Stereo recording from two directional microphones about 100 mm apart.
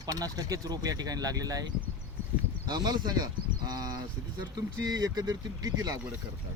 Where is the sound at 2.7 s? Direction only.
45° right (ahead or behind).